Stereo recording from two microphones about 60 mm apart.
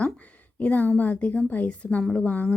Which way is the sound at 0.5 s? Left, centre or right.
Left.